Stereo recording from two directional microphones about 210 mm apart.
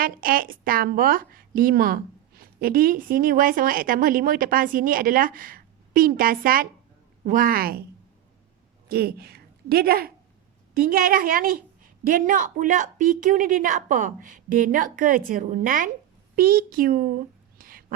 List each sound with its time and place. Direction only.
0.0 s a woman's voice: 45° right (ahead or behind)
8.9 s a woman's voice: 50° right (ahead or behind)
17.6 s a sound: 40° right (ahead or behind)